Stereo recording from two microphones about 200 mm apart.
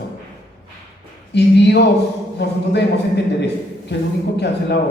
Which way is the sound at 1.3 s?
55° left (ahead or behind).